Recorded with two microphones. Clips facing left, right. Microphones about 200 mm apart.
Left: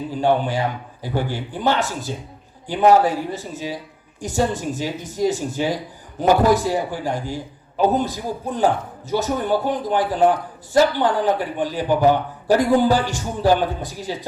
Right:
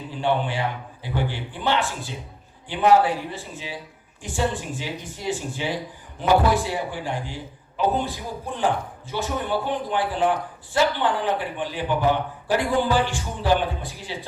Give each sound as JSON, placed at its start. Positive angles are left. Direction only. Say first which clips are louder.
{"t": 0.1, "sound": "speech", "louder": "left 4 dB", "side_deg": 40}